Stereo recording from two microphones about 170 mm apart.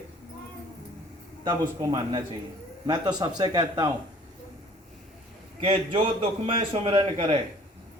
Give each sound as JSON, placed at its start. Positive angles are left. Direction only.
{"t": 1.5, "sound": "speech", "side_deg": -25}
{"t": 5.5, "sound": "a man's voice", "side_deg": -30}